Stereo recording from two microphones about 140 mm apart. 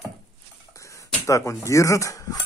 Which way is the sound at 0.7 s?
20° left (ahead or behind).